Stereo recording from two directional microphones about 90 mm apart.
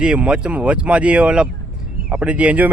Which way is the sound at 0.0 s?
10° right (ahead or behind).